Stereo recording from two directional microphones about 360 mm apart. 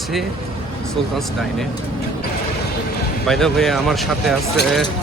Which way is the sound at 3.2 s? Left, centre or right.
Centre.